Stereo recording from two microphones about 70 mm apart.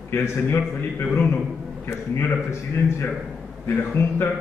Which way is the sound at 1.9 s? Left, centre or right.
Left.